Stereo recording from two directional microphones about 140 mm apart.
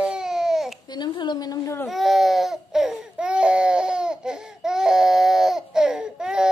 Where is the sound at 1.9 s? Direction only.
Centre (ahead or behind).